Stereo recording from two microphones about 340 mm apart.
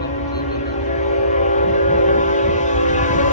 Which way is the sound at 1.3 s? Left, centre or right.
Left.